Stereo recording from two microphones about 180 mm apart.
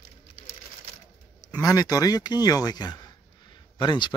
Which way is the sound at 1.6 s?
20° left (ahead or behind).